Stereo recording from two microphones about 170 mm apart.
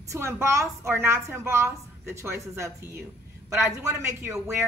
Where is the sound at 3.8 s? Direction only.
15° right (ahead or behind).